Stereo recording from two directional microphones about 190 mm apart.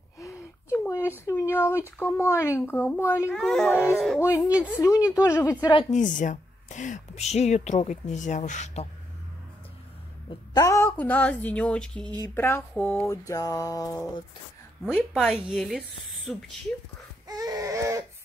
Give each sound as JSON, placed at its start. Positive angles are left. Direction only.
{"t": 0.2, "sound": "speech", "side_deg": 15}
{"t": 3.3, "sound": "a child's voice", "side_deg": 0}
{"t": 4.2, "sound": "music", "side_deg": 15}
{"t": 5.9, "sound": "speech", "side_deg": 40}
{"t": 10.5, "sound": "music", "side_deg": 15}
{"t": 15.1, "sound": "a child's voice", "side_deg": -5}
{"t": 17.3, "sound": "baby cry", "side_deg": -20}